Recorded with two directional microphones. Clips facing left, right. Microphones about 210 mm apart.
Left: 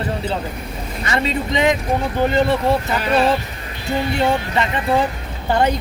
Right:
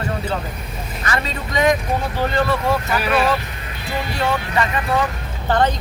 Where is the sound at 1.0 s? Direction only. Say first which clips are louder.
Left 4 dB; 25° left (ahead or behind).